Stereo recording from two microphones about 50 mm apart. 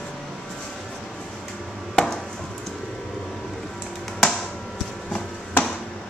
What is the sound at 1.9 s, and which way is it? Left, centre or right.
Chopping, centre.